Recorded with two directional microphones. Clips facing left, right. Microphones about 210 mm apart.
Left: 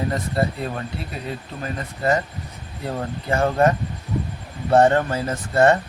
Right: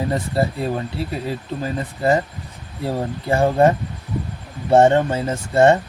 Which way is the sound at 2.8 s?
25° right (ahead or behind).